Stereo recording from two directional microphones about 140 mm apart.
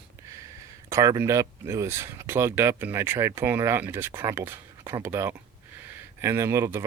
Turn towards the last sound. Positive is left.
turn(degrees=-20)  # may be behind; listen again after turning